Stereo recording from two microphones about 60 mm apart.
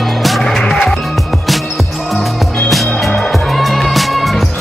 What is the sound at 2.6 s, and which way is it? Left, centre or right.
Music, centre.